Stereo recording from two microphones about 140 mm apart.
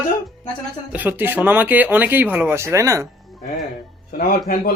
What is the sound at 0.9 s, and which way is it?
Speech, 10° right (ahead or behind).